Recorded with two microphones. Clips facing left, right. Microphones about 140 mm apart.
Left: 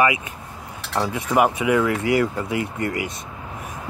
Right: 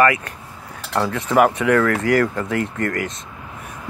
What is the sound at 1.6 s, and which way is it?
Speech, 15° left (ahead or behind).